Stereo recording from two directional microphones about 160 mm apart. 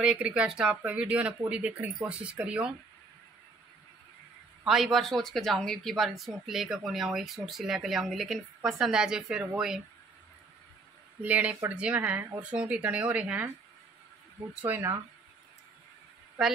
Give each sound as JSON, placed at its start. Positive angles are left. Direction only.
{"t": 0.0, "sound": "speech", "side_deg": -5}
{"t": 4.6, "sound": "speech", "side_deg": 0}
{"t": 11.2, "sound": "speech", "side_deg": -10}
{"t": 14.7, "sound": "speech", "side_deg": -15}